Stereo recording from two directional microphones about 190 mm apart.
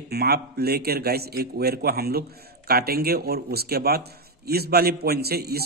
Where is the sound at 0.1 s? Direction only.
55° right (ahead or behind).